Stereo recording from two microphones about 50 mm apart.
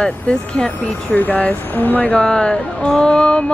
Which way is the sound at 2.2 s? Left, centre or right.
Left.